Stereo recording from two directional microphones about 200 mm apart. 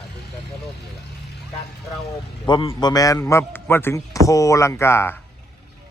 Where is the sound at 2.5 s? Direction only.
25° left (ahead or behind).